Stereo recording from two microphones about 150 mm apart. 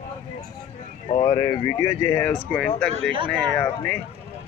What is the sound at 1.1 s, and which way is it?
Speech, 25° left (ahead or behind).